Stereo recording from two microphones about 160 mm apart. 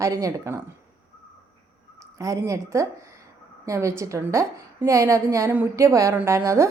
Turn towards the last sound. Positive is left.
turn(degrees=-20)  # may be behind; listen again after turning